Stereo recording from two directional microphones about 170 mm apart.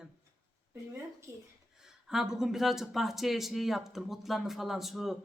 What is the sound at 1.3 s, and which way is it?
Speech, 20° right (ahead or behind).